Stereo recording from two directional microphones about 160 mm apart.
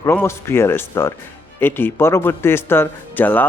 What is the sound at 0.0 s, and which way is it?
A man's voice, 15° left (ahead or behind).